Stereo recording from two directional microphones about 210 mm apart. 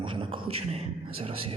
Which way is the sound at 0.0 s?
25° right (ahead or behind).